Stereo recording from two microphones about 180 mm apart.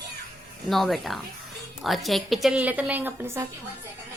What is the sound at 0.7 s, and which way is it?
A woman's voice, centre (ahead or behind).